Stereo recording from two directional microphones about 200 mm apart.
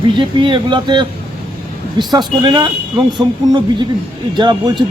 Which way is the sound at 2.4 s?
25° right (ahead or behind).